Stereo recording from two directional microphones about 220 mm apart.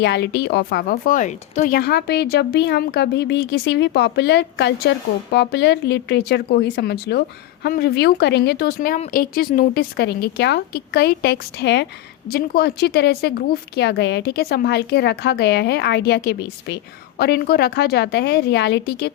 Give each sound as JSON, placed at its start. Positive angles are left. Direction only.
{"t": 0.0, "sound": "a woman's voice", "side_deg": 50}